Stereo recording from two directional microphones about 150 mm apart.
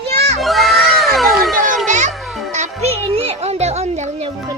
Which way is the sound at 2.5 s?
50° right (ahead or behind).